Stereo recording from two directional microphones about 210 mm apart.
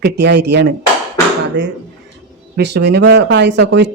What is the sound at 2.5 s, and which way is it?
Speech, 55° right (ahead or behind).